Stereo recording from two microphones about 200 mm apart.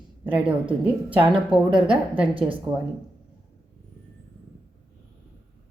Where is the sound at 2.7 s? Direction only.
20° right (ahead or behind).